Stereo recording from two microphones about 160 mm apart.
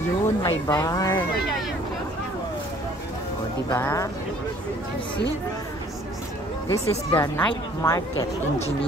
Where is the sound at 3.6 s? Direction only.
15° left (ahead or behind).